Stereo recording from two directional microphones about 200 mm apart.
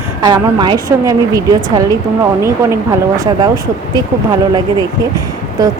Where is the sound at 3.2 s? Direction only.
20° right (ahead or behind).